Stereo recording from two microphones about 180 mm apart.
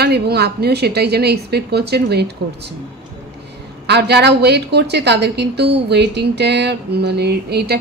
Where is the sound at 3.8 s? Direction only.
70° right (ahead or behind).